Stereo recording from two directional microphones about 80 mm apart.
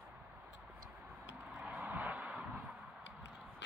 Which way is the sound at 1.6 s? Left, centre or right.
Centre.